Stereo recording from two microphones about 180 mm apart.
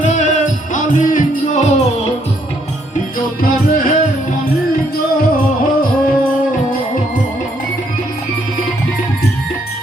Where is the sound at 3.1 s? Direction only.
50° left (ahead or behind).